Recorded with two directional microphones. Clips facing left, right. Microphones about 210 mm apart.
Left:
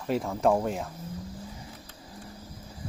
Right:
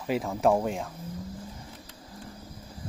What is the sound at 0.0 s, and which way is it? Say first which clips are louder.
Speech: even; 5° right (ahead or behind).